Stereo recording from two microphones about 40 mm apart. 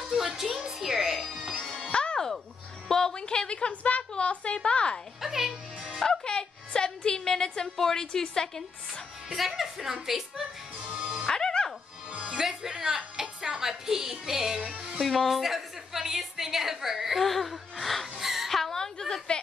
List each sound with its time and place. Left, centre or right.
0.7 s music: centre
1.4 s music: centre
1.9 s music: left
2.9 s a sound: centre
5.2 s music: centre
6.0 s a sound: centre
7.2 s a woman's voice: centre
9.3 s speech: centre
11.2 s music: centre
12.3 s a woman's voice: centre
15.0 s a sound: centre
18.5 s a sound: centre